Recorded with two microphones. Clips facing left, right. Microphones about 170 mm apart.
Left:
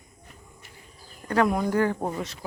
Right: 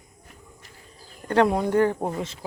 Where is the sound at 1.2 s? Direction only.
30° right (ahead or behind).